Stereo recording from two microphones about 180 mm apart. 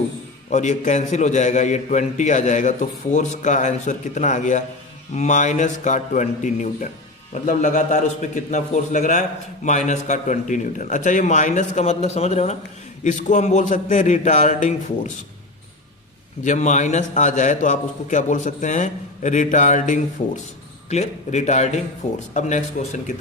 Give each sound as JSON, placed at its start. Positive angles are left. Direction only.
{"t": 0.5, "sound": "a man's voice", "side_deg": 40}
{"t": 16.4, "sound": "a man's voice", "side_deg": 40}